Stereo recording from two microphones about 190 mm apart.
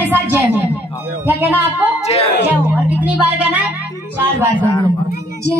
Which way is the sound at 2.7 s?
10° right (ahead or behind).